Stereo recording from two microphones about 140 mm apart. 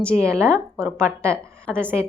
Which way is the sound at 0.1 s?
15° right (ahead or behind).